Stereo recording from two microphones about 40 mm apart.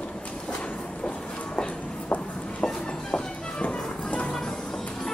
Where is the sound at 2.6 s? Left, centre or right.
Left.